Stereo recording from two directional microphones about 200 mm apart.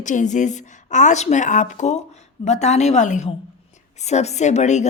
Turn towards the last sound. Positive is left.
turn(degrees=35)  # may be behind; listen again after turning